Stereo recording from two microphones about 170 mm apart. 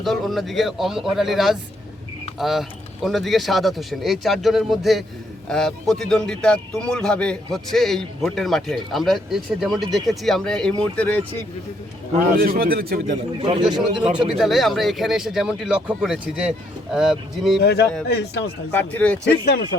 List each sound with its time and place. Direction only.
0.0 s speech: centre (ahead or behind)
12.4 s a man's voice: 60° right (ahead or behind)
13.4 s a man's voice: 30° right (ahead or behind)
13.7 s speech: 5° right (ahead or behind)
17.6 s a man's voice: 75° left (ahead or behind)
18.7 s speech: 10° left (ahead or behind)
19.2 s a man's voice: 75° left (ahead or behind)